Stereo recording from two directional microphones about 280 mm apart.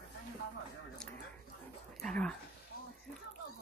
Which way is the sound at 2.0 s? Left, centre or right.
Centre.